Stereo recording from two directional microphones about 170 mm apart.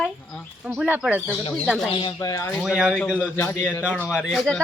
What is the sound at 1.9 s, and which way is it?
Speech, 25° left (ahead or behind).